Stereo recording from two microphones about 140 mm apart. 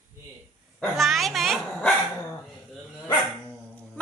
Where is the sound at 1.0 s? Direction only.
Centre (ahead or behind).